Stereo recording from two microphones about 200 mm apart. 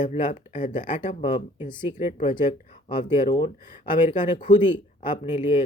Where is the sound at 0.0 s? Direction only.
45° left (ahead or behind).